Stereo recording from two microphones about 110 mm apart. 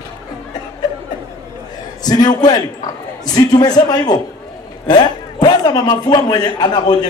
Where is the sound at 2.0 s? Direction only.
40° left (ahead or behind).